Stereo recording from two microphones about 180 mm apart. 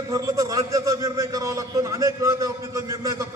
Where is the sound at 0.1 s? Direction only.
20° right (ahead or behind).